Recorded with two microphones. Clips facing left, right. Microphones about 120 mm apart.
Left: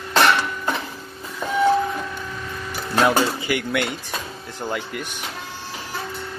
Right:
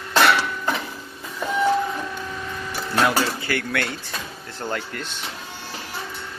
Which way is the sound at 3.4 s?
15° left (ahead or behind).